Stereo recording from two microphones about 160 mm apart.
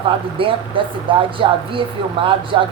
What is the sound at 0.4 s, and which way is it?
Speech, 35° right (ahead or behind).